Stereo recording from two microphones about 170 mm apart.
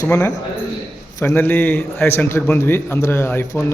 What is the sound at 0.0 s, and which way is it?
A man's voice, 20° left (ahead or behind).